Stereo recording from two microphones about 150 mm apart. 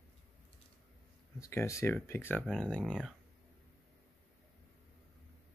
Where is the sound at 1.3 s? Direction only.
20° left (ahead or behind).